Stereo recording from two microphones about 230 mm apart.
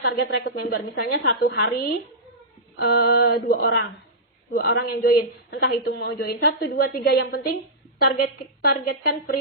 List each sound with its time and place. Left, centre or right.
0.0 s a woman's voice: left